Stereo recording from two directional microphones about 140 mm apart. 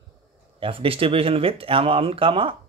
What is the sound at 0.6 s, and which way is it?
Speech, 40° right (ahead or behind).